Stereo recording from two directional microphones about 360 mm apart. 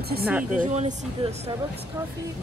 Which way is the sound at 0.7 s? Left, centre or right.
Centre.